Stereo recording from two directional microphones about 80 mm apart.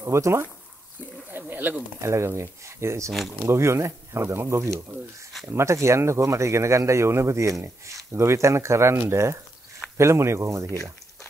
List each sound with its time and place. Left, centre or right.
0.0 s speech: right
1.5 s speech: right
2.0 s speech: right
3.1 s speech: centre
3.4 s speech: right